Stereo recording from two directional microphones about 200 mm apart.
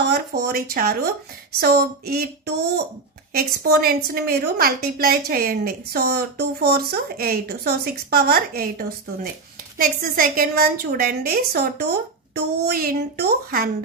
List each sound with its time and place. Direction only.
0.1 s a woman's voice: 50° right (ahead or behind)